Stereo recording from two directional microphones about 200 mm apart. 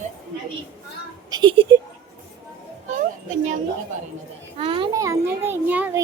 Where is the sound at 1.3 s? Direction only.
25° right (ahead or behind).